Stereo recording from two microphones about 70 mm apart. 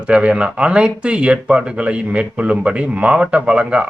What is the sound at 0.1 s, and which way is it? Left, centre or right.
Speech, centre.